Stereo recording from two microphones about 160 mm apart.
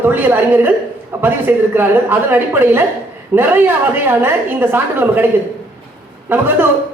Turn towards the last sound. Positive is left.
turn(degrees=-10)  # may be behind; listen again after turning